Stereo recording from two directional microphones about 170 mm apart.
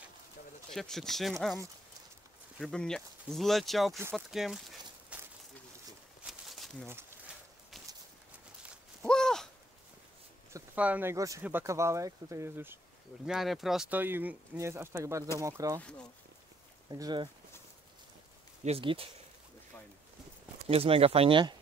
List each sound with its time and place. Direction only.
0.7 s speech: centre (ahead or behind)
2.6 s speech: 5° left (ahead or behind)
4.1 s a sound: centre (ahead or behind)
6.2 s a sound: centre (ahead or behind)
6.9 s a sound: 15° right (ahead or behind)
9.0 s a sound: 5° left (ahead or behind)
10.5 s speech: 10° right (ahead or behind)
13.2 s speech: centre (ahead or behind); by 15.8 s 20° right (ahead or behind)
15.8 s speech: 5° left (ahead or behind)
16.9 s speech: 25° right (ahead or behind)
18.6 s speech: 35° right (ahead or behind)
20.6 s speech: 35° right (ahead or behind)